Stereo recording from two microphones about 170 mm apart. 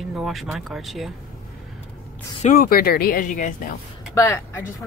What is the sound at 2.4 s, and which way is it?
Speech, 55° left (ahead or behind).